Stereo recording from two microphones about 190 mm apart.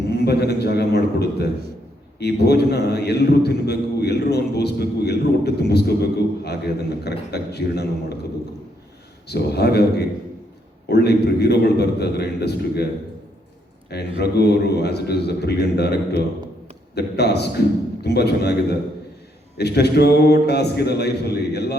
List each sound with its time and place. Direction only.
0.1 s a man's voice: 60° left (ahead or behind)
9.3 s a man's voice: 60° left (ahead or behind)
13.9 s a man's voice: 60° left (ahead or behind)
19.5 s a man's voice: 60° left (ahead or behind)